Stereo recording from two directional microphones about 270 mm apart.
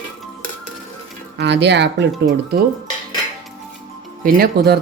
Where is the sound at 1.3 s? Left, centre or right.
Right.